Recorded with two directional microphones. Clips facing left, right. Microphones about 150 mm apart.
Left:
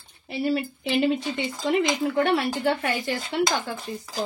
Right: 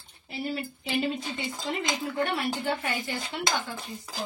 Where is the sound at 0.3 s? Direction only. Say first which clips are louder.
Left 7 dB; 75° left (ahead or behind).